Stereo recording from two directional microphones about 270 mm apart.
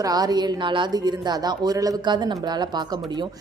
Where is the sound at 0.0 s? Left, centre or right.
Centre.